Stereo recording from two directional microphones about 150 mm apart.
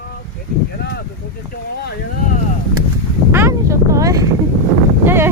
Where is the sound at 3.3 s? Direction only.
20° right (ahead or behind).